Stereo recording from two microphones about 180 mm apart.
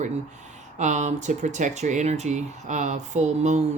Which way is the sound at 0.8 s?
40° right (ahead or behind).